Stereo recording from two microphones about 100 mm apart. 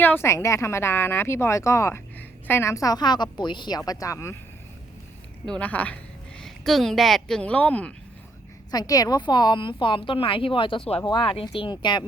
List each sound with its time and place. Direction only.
0.0 s a woman's voice: 20° left (ahead or behind)
5.5 s speech: 15° left (ahead or behind)
6.4 s speech: 5° left (ahead or behind)
8.7 s a woman's voice: 40° left (ahead or behind); by 11.0 s 70° left (ahead or behind)
11.0 s speech: 50° left (ahead or behind)